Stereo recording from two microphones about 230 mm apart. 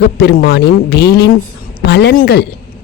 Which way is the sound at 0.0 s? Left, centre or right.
Left.